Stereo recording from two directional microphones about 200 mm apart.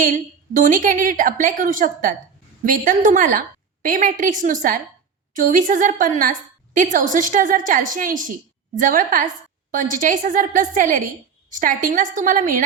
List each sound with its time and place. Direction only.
0.0 s a woman's voice: 45° right (ahead or behind)